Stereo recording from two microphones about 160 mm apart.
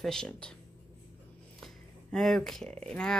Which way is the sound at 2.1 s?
Centre (ahead or behind).